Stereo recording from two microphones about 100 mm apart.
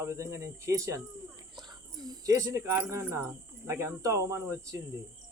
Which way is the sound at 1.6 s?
45° right (ahead or behind).